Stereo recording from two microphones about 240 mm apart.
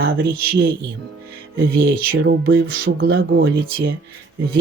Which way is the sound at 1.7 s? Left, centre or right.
Right.